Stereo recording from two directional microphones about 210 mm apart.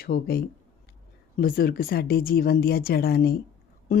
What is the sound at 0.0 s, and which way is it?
A woman's voice, 45° left (ahead or behind).